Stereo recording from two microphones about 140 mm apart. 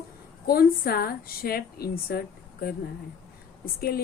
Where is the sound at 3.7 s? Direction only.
90° left.